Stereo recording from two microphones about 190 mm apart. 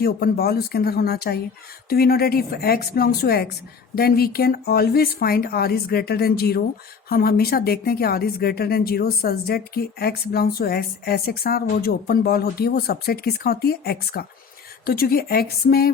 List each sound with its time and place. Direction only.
0.0 s speech: 55° left (ahead or behind)